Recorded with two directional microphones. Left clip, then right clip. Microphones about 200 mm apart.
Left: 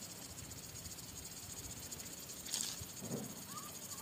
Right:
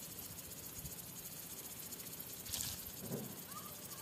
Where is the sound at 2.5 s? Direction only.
20° left (ahead or behind).